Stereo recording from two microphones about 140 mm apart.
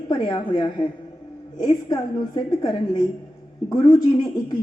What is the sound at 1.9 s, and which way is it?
A woman's voice, 30° left (ahead or behind).